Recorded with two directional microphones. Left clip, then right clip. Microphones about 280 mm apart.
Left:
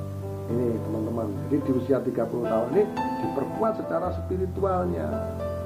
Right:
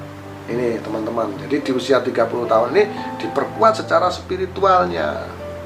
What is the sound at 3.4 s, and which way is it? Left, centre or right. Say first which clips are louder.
A man's voice: right 14 dB; centre.